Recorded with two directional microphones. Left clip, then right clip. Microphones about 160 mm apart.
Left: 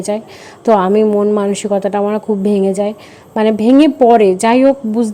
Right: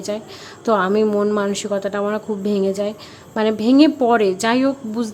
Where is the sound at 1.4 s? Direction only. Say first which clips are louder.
Left 6 dB; 25° left (ahead or behind).